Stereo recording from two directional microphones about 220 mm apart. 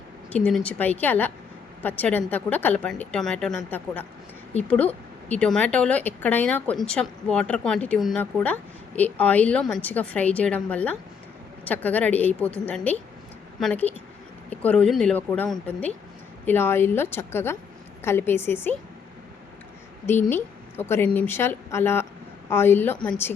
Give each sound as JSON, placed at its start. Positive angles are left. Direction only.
{"t": 0.3, "sound": "a woman's voice", "side_deg": 5}
{"t": 20.3, "sound": "a woman's voice", "side_deg": 10}